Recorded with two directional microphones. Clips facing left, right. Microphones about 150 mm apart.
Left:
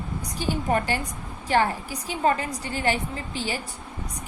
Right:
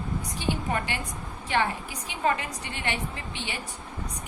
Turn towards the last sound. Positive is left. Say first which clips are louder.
# left 6 dB
turn(degrees=40)  # may be behind; listen again after turning